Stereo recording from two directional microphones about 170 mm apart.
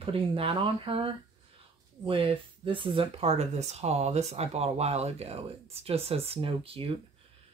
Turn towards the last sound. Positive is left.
turn(degrees=-35)  # may be behind; listen again after turning